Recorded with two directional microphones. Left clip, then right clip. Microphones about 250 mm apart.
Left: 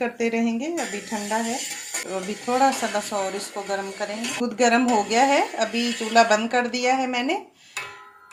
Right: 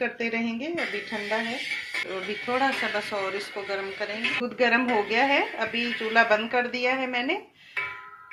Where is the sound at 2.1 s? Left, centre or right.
Left.